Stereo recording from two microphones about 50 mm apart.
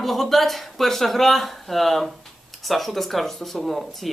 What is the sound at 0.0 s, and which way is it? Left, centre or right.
Speech, centre.